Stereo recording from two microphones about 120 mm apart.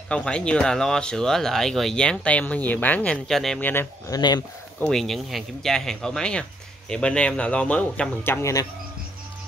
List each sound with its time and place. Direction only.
0.1 s speech: 10° left (ahead or behind)
4.1 s speech: 35° left (ahead or behind)
4.7 s speech: 5° left (ahead or behind); by 8.6 s 25° left (ahead or behind)